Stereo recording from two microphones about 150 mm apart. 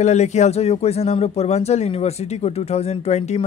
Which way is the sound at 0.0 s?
50° left (ahead or behind).